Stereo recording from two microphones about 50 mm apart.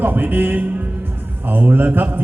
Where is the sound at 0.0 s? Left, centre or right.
Right.